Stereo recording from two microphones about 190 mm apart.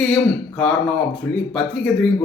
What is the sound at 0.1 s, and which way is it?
Speech, 5° left (ahead or behind).